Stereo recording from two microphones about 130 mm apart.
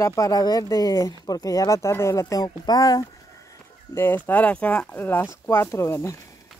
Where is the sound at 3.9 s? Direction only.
15° left (ahead or behind).